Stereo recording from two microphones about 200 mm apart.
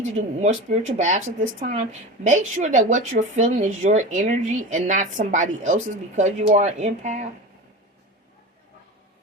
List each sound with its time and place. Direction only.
0.2 s a woman's voice: 35° right (ahead or behind)